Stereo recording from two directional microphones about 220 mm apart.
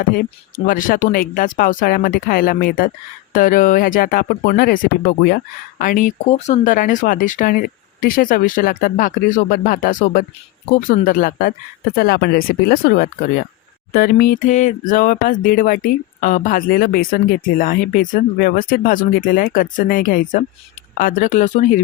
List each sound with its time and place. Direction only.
0.2 s speech: 40° left (ahead or behind)